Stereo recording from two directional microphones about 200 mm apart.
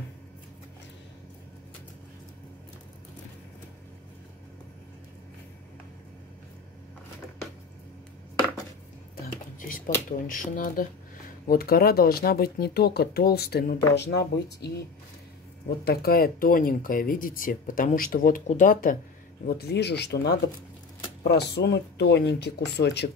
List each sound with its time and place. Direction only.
9.6 s a sound: 45° left (ahead or behind)
10.2 s speech: 45° left (ahead or behind)
15.8 s speech: 50° left (ahead or behind)